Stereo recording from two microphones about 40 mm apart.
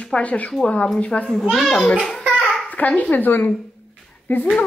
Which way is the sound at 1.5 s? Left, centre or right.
Centre.